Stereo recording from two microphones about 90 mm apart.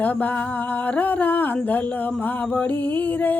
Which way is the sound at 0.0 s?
15° left (ahead or behind).